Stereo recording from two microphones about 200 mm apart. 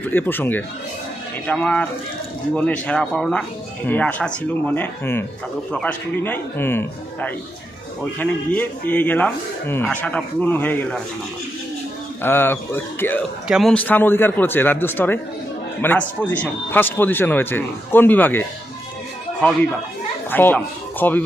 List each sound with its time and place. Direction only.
0.1 s speech: 10° left (ahead or behind)
12.2 s speech: 10° left (ahead or behind)
20.3 s speech: 10° left (ahead or behind)